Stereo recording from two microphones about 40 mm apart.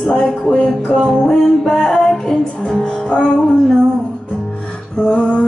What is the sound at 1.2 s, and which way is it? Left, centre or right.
Music, centre.